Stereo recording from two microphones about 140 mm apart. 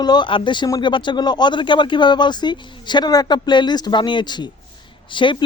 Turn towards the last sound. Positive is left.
turn(degrees=35)  # may be behind; listen again after turning